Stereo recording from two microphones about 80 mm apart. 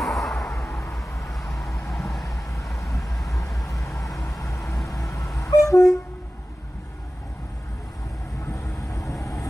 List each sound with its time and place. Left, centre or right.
0.0 s a sound: centre
1.3 s vehicle: centre
3.3 s vehicle: left
5.4 s train: left
8.5 s vehicle: left